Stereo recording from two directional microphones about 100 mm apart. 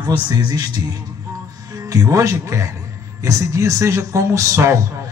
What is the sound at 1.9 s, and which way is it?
A man's voice, 35° right (ahead or behind).